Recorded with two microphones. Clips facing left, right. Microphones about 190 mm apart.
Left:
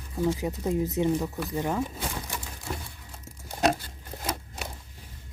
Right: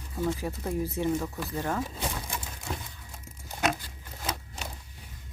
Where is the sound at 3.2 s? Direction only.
35° left (ahead or behind).